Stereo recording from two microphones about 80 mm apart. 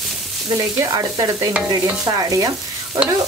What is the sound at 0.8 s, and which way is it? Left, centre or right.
Stir, right.